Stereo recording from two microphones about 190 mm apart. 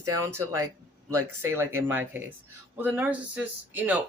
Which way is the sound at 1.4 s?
10° right (ahead or behind).